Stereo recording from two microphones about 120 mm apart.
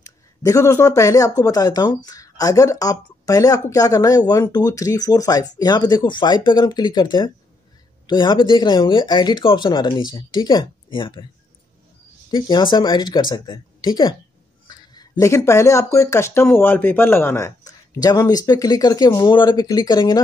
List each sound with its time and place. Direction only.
0.0 s speech: 25° left (ahead or behind); by 11.2 s 45° left (ahead or behind)
12.3 s speech: 35° left (ahead or behind); by 17.5 s 20° left (ahead or behind)
17.6 s speech: 30° left (ahead or behind)